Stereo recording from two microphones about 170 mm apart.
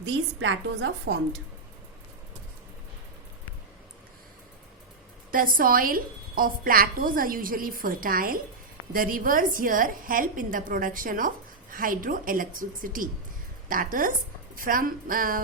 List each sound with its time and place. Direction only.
0.5 s a woman's voice: 90° right
5.3 s a woman's voice: 55° right (ahead or behind)